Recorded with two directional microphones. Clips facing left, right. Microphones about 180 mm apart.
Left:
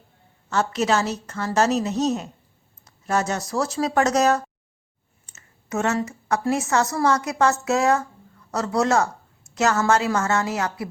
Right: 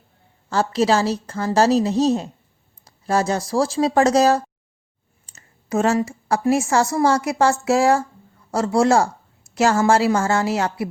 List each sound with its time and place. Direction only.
0.5 s a woman's voice: 30° right (ahead or behind)
5.2 s clicking: 30° right (ahead or behind)
6.4 s a woman's voice: 25° right (ahead or behind)